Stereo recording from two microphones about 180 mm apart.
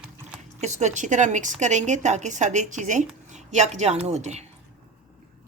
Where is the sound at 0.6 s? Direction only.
40° right (ahead or behind).